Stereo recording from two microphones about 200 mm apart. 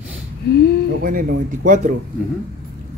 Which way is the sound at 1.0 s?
50° right (ahead or behind).